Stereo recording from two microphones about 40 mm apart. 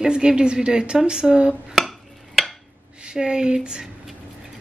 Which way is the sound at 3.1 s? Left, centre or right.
Right.